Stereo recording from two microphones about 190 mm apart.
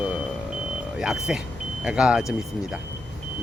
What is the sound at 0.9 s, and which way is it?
Speech, 5° right (ahead or behind).